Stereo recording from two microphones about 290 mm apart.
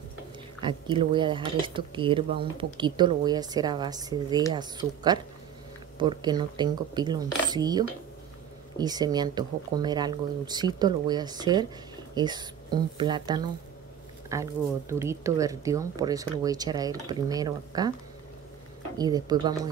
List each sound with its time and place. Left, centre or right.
0.6 s speech: centre
18.9 s speech: centre